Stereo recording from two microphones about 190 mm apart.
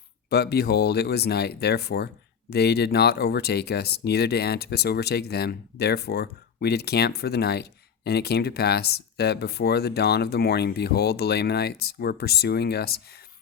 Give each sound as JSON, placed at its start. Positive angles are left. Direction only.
{"t": 0.3, "sound": "speech", "side_deg": 55}